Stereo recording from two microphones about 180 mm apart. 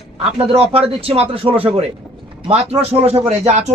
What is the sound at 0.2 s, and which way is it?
Speech, 30° right (ahead or behind).